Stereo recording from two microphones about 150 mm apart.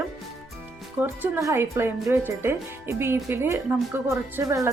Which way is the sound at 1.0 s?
15° right (ahead or behind).